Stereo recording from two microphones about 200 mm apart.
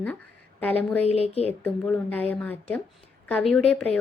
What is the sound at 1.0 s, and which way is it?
Speech, 30° left (ahead or behind).